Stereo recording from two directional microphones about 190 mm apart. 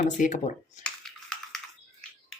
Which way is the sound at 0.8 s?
5° left (ahead or behind).